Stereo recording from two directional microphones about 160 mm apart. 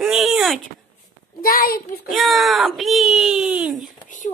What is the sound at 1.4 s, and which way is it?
Speech, 65° left (ahead or behind).